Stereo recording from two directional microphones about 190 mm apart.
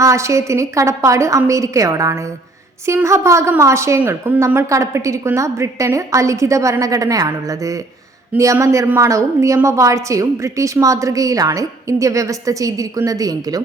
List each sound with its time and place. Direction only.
0.0 s a woman's voice: 15° right (ahead or behind)